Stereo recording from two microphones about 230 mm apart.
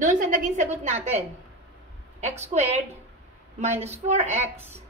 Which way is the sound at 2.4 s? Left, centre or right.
Right.